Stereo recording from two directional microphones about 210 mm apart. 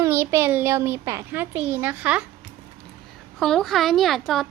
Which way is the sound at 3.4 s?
Centre (ahead or behind).